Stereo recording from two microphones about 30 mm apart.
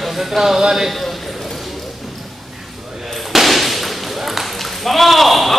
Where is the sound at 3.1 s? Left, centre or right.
Centre.